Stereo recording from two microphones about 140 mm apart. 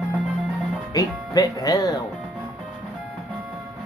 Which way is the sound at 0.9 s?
25° left (ahead or behind).